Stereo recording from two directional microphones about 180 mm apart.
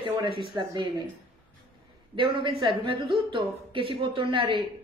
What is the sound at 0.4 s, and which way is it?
Speech, 25° right (ahead or behind).